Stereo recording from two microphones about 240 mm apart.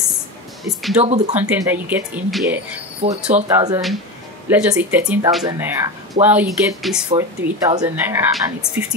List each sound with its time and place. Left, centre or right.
0.7 s speech: centre
1.0 s speech: right
1.5 s a woman's voice: centre
3.0 s speech: right
3.4 s a woman's voice: centre